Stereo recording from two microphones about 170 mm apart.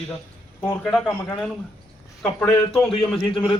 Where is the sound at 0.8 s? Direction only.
5° left (ahead or behind).